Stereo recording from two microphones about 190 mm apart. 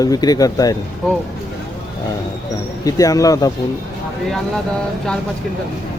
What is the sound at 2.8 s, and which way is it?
Speech, 20° left (ahead or behind).